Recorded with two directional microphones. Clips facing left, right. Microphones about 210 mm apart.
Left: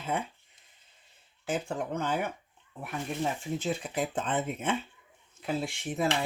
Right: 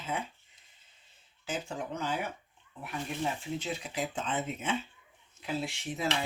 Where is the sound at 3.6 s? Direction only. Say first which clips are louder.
Left 4 dB; 50° left (ahead or behind).